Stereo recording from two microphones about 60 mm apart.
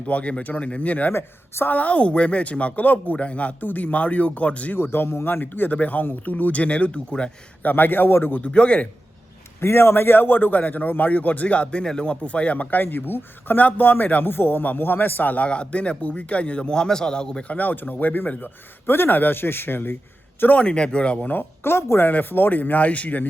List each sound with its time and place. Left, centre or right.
0.0 s a man's voice: left
1.1 s speech: left
1.7 s a man's voice: left
4.8 s a man's voice: left
8.4 s a man's voice: left
9.6 s a man's voice: left; by 17.6 s centre
17.6 s a man's voice: left
20.6 s a man's voice: centre
21.6 s speech: left
22.0 s a man's voice: left